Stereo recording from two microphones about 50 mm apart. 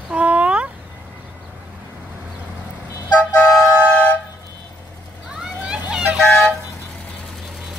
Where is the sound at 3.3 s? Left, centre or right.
Left.